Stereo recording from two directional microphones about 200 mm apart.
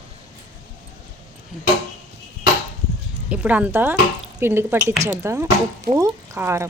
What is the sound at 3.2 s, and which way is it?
A woman's voice, 5° right (ahead or behind).